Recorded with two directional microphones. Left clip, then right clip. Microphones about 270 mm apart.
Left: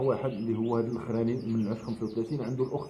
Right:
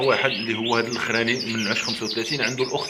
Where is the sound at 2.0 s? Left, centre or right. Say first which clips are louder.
Right 9 dB; right.